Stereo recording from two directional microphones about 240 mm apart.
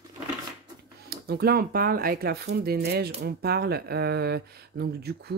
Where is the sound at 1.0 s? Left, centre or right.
Right.